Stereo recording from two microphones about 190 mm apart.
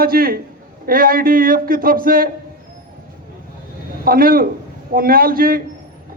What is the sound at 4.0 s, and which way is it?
A man's voice, 50° right (ahead or behind).